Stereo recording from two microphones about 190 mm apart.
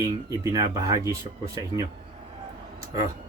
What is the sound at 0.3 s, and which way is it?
Speech, 20° right (ahead or behind).